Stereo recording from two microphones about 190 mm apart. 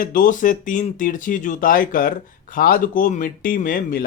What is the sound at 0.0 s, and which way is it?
Speech, 45° left (ahead or behind).